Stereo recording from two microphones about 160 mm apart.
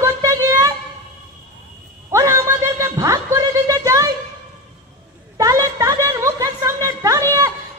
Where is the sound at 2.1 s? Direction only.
15° right (ahead or behind).